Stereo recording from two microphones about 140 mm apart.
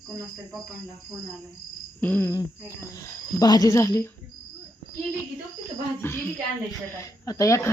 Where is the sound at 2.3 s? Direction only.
25° left (ahead or behind).